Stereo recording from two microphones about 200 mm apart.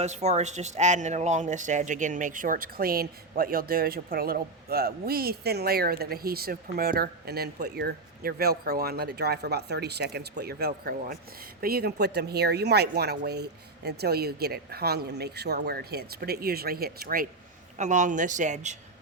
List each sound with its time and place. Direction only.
0.0 s speech: 35° right (ahead or behind)
17.7 s speech: 35° right (ahead or behind)